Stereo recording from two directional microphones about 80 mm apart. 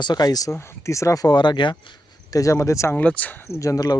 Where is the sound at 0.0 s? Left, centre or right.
Left.